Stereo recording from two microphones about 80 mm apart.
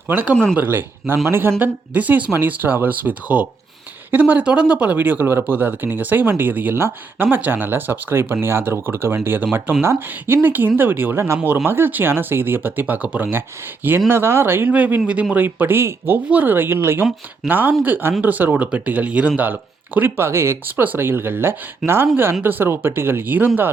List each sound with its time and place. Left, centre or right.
0.1 s speech: right